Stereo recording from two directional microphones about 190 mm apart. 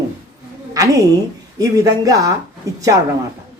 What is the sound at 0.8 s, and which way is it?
A woman's voice, 20° right (ahead or behind).